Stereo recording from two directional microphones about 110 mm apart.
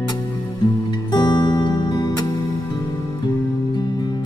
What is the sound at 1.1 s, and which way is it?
Music, 40° left (ahead or behind).